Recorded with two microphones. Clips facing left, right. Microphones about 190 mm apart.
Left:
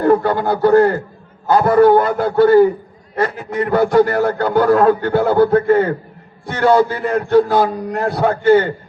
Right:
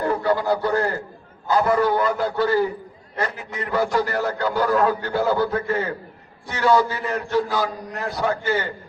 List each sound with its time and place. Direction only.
0.0 s a man's voice: 55° left (ahead or behind)